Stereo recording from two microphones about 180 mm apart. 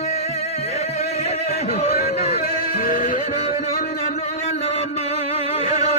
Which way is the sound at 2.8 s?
45° left (ahead or behind).